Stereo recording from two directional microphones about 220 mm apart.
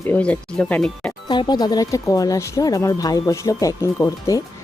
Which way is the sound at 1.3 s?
20° left (ahead or behind).